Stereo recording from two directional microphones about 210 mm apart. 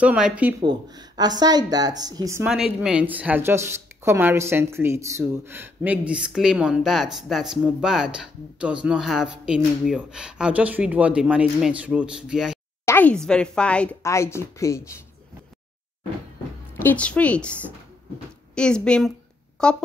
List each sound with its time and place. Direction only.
0.0 s speech: 5° right (ahead or behind)
0.6 s speech: 20° right (ahead or behind)
2.5 s speech: centre (ahead or behind)
12.8 s speech: 10° left (ahead or behind)
16.7 s speech: 10° left (ahead or behind)